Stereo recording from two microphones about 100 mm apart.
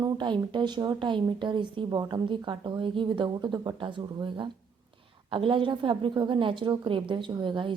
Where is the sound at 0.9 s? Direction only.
55° right (ahead or behind).